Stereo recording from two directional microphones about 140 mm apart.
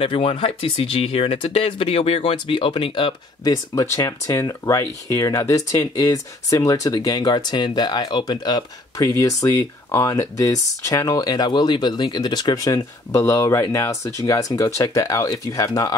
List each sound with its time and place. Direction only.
0.0 s speech: 40° left (ahead or behind); by 16.0 s 25° left (ahead or behind)